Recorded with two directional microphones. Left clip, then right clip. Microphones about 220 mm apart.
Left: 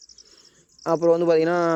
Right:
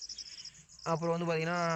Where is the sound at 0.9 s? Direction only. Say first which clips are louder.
Left 15 dB; 40° left (ahead or behind).